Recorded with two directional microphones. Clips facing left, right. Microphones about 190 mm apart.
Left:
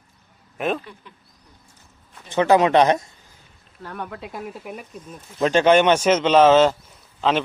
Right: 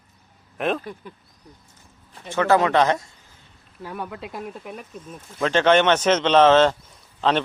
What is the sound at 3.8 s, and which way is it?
A man's voice, 5° right (ahead or behind).